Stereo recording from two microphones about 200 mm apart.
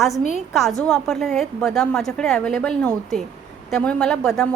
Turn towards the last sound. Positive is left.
turn(degrees=0)  # may be behind; listen again after turning